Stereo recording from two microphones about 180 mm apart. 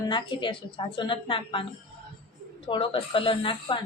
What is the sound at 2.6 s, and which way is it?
A woman's voice, 30° left (ahead or behind).